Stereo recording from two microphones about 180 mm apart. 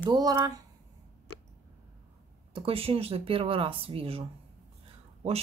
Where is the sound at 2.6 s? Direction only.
30° right (ahead or behind).